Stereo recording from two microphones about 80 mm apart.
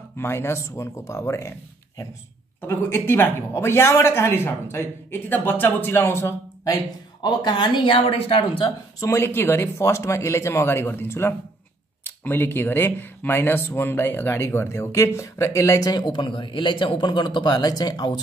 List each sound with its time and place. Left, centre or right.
0.2 s speech: left
2.6 s a man's voice: left
7.2 s speech: left
9.0 s speech: left
16.1 s a man's voice: left